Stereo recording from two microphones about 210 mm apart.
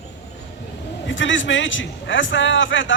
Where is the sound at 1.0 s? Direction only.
65° left (ahead or behind).